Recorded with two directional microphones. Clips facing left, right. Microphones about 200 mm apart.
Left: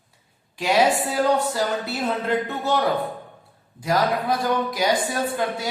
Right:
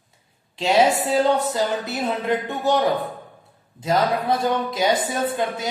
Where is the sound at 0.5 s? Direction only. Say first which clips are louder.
Right 2 dB; 25° right (ahead or behind).